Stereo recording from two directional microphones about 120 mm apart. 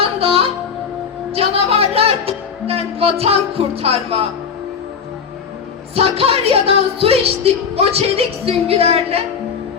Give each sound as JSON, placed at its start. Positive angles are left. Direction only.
{"t": 0.0, "sound": "music", "side_deg": -55}
{"t": 1.3, "sound": "a woman's voice", "side_deg": -55}
{"t": 5.9, "sound": "a woman's voice", "side_deg": -55}